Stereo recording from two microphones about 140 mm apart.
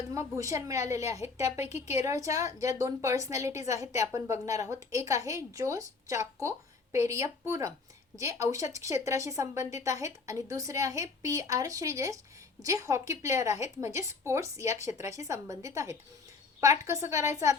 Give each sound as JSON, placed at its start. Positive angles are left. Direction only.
{"t": 0.1, "sound": "a woman's voice", "side_deg": -25}
{"t": 1.5, "sound": "a woman's voice", "side_deg": 50}
{"t": 1.9, "sound": "a woman's voice", "side_deg": -25}